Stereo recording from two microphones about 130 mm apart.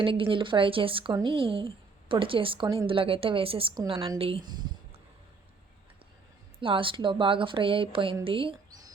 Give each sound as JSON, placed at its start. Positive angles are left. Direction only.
{"t": 0.0, "sound": "a woman's voice", "side_deg": -40}
{"t": 6.6, "sound": "speech", "side_deg": -40}